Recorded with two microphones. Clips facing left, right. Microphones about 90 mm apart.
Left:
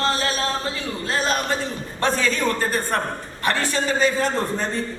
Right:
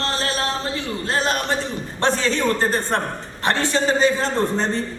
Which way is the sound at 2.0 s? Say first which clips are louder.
Right 1 dB; 25° right (ahead or behind).